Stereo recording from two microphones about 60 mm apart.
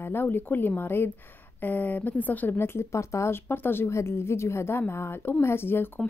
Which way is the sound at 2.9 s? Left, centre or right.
Left.